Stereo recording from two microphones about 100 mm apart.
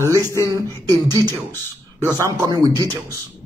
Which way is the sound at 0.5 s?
35° right (ahead or behind).